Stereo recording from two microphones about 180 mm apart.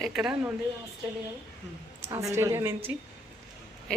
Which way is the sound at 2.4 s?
15° right (ahead or behind).